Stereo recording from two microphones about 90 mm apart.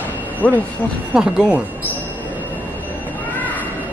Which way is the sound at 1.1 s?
10° right (ahead or behind).